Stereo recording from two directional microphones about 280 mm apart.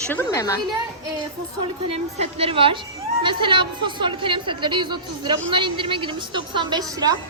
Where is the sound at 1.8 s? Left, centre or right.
Right.